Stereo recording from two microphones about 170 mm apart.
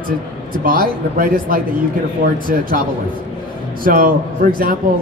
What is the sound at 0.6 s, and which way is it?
A man's voice, 55° right (ahead or behind).